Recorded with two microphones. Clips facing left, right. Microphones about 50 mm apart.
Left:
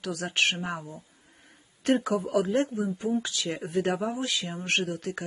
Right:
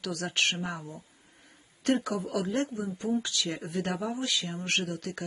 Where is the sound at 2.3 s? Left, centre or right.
Centre.